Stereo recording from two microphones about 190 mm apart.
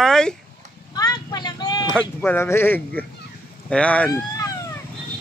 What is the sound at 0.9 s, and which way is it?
Vehicle, 20° left (ahead or behind).